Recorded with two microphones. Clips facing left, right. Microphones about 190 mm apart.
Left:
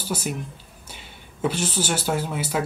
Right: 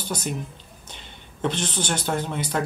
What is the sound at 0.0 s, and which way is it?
Speech, 5° left (ahead or behind).